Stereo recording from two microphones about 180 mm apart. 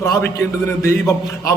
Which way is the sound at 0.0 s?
15° left (ahead or behind).